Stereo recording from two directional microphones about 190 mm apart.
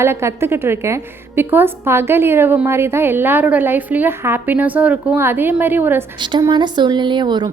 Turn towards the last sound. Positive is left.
turn(degrees=-25)  # may be behind; listen again after turning